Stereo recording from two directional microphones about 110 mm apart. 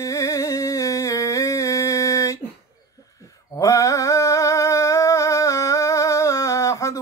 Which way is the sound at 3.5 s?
30° left (ahead or behind).